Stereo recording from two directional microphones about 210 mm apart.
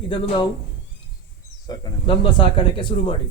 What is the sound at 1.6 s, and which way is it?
Speech, 20° left (ahead or behind).